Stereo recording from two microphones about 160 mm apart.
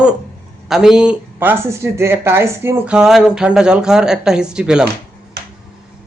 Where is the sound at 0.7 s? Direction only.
5° right (ahead or behind).